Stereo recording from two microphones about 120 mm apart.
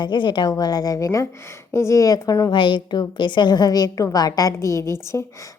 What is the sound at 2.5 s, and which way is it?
A woman's voice, 40° left (ahead or behind).